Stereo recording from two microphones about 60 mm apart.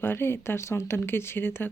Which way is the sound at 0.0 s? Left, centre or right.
Left.